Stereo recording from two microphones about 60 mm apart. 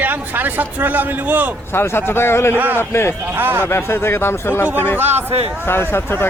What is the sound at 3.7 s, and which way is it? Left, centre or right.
Speech, left.